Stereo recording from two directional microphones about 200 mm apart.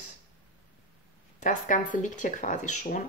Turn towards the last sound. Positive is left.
turn(degrees=35)  # may be behind; listen again after turning